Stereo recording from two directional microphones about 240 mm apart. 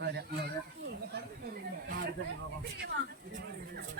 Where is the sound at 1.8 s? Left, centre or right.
Right.